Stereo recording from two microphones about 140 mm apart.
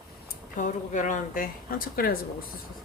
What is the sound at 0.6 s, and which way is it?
Speech, 60° left (ahead or behind).